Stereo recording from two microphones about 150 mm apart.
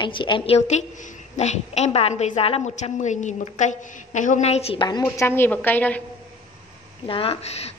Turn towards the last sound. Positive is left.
turn(degrees=45)  # may be behind; listen again after turning